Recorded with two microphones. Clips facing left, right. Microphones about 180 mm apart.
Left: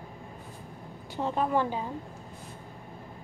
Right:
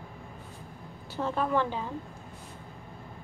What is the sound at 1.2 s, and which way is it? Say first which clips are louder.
Speech: left 1 dB; 15° left (ahead or behind).